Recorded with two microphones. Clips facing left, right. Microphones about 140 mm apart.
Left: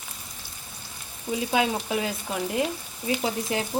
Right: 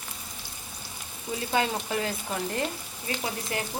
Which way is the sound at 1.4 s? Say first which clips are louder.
Left 3 dB; 10° left (ahead or behind).